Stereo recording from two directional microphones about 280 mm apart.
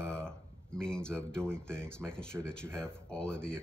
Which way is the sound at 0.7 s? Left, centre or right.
Centre.